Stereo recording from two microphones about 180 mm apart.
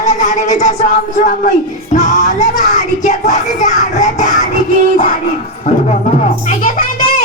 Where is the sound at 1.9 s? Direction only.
40° left (ahead or behind).